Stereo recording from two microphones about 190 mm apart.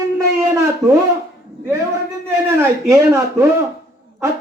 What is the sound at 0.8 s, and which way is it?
Speech, 15° right (ahead or behind).